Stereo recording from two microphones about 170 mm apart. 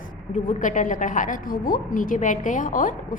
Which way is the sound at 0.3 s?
50° left (ahead or behind).